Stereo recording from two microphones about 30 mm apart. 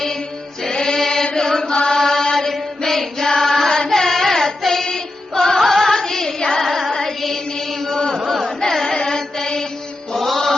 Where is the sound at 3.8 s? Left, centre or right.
Centre.